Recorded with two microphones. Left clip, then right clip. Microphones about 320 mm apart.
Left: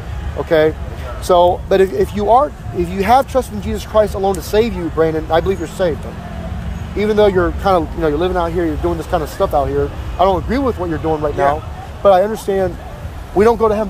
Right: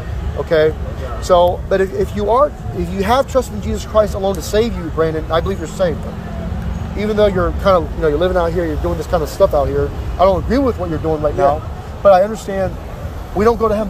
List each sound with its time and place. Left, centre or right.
0.5 s speech: centre
7.0 s speech: centre